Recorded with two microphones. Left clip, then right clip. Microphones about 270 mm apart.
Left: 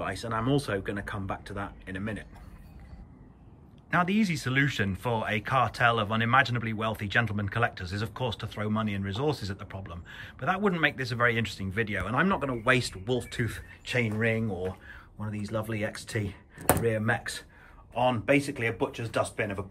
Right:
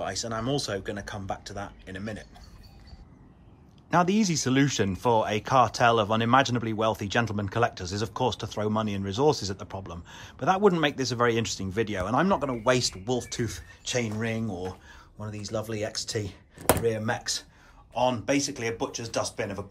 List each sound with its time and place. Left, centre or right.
0.0 s speech: centre
3.9 s speech: centre